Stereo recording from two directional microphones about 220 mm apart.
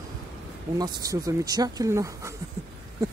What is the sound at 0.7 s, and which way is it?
Speech, 15° right (ahead or behind).